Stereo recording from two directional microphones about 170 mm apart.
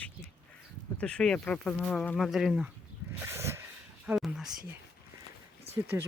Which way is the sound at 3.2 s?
15° right (ahead or behind).